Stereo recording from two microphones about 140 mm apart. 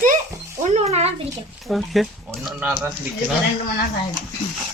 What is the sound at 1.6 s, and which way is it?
Speech, centre (ahead or behind).